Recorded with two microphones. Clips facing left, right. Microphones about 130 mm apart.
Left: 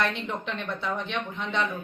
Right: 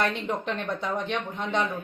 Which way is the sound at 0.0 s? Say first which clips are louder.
Right 2 dB; 40° right (ahead or behind).